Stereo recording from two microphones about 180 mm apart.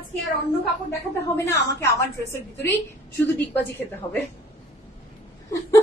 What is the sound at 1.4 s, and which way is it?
A woman's voice, 15° left (ahead or behind).